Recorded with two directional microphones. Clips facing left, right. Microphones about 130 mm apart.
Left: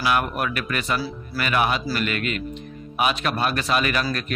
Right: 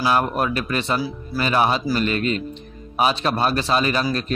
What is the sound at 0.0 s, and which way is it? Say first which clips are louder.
A man's voice: right 3 dB; 30° right (ahead or behind).